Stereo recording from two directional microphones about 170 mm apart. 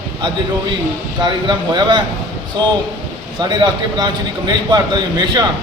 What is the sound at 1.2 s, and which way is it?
Speech, 25° right (ahead or behind).